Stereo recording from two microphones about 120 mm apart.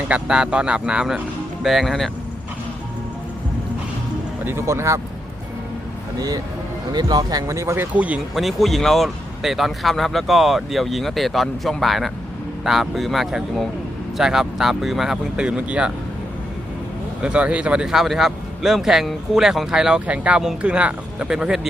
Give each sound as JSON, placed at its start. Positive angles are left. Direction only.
{"t": 0.1, "sound": "speech", "side_deg": -5}
{"t": 4.4, "sound": "speech", "side_deg": -20}
{"t": 6.1, "sound": "speech", "side_deg": -30}
{"t": 7.9, "sound": "speech", "side_deg": -10}
{"t": 8.4, "sound": "speech", "side_deg": 0}
{"t": 17.2, "sound": "speech", "side_deg": -10}